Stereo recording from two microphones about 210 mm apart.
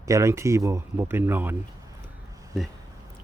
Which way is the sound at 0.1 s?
15° right (ahead or behind).